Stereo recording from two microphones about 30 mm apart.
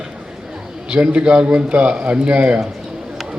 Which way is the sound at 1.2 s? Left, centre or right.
Right.